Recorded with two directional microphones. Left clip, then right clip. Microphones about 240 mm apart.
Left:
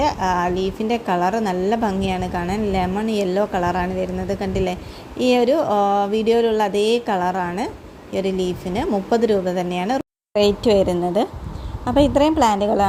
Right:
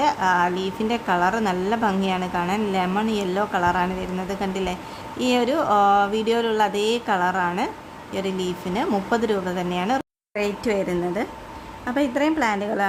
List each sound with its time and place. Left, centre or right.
0.0 s a woman's voice: centre
10.3 s a woman's voice: centre
10.7 s a woman's voice: centre